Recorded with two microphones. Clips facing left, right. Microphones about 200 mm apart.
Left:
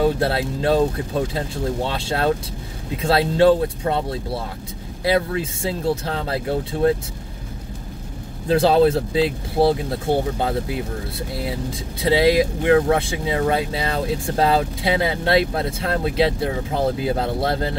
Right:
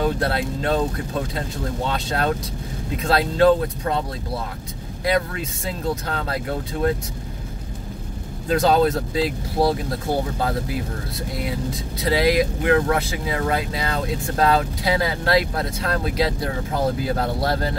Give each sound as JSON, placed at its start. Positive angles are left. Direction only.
{"t": 0.0, "sound": "speech", "side_deg": 25}
{"t": 1.9, "sound": "speech", "side_deg": 30}
{"t": 8.5, "sound": "speech", "side_deg": 30}